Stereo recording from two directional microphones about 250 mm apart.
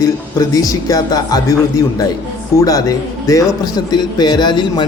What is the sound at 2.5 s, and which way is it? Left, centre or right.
Speech, centre.